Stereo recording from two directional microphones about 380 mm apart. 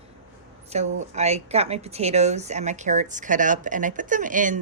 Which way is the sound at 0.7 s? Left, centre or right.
Centre.